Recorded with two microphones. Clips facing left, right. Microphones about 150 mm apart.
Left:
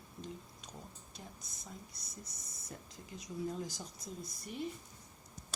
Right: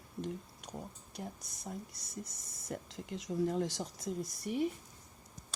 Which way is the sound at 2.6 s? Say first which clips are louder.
Right 9 dB; 90° right.